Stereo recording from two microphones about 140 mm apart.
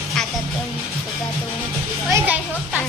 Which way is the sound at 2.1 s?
20° right (ahead or behind).